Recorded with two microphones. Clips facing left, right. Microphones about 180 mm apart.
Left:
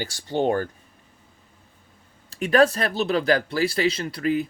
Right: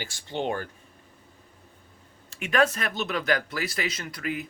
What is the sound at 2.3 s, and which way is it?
Speech, 35° left (ahead or behind).